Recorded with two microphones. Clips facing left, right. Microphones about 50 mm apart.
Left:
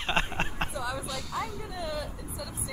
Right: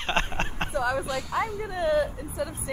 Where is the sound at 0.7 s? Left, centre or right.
Right.